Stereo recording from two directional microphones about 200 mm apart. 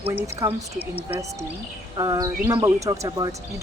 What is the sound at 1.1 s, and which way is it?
Speech, 15° right (ahead or behind).